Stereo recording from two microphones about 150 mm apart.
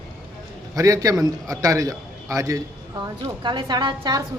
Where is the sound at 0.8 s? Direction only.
20° right (ahead or behind).